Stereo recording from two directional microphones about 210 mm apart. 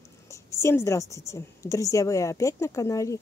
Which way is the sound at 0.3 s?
15° left (ahead or behind).